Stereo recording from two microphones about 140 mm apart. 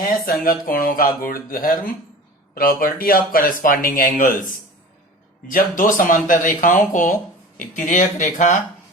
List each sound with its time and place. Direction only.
0.0 s speech: 90° left
5.5 s speech: 75° left (ahead or behind)